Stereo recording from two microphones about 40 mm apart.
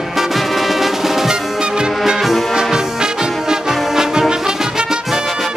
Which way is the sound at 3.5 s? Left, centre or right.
Centre.